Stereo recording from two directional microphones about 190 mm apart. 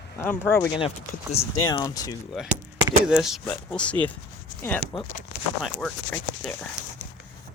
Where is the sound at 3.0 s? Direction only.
5° right (ahead or behind).